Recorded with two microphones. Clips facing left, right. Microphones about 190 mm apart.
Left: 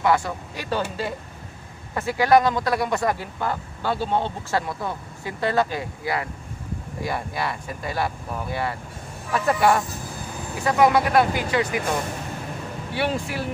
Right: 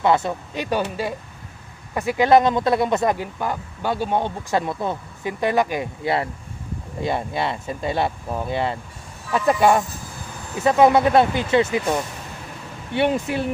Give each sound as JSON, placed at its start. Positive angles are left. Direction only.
{"t": 0.0, "sound": "speech", "side_deg": -20}
{"t": 12.9, "sound": "speech", "side_deg": -20}